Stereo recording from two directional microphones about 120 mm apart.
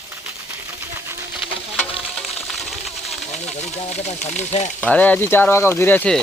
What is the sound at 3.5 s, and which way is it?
Speech, 65° left (ahead or behind).